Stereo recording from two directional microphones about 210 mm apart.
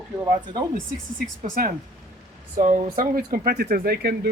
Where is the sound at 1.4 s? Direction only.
40° right (ahead or behind).